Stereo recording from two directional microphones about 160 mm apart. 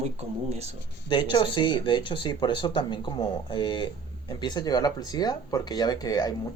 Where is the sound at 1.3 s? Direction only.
30° left (ahead or behind).